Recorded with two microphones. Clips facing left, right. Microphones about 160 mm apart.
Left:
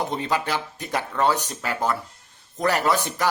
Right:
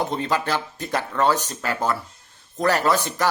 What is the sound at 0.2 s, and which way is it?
Speech, 15° left (ahead or behind).